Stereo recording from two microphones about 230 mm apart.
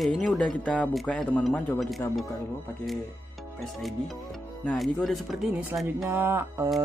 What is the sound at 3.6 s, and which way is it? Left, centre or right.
Speech, centre.